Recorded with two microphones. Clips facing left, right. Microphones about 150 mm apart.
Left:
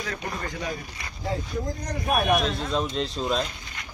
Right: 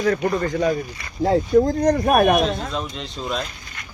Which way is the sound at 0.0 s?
50° right (ahead or behind).